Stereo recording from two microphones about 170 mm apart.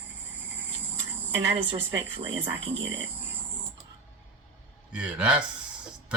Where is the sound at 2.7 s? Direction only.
90° right.